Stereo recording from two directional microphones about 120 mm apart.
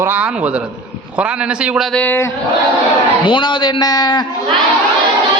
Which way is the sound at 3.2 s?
40° left (ahead or behind).